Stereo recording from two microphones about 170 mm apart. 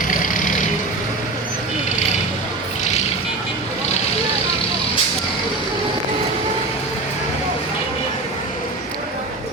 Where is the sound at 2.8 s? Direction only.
40° left (ahead or behind).